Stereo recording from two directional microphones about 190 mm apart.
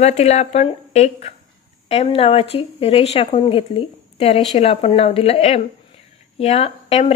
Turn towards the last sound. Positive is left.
turn(degrees=30)  # may be behind; listen again after turning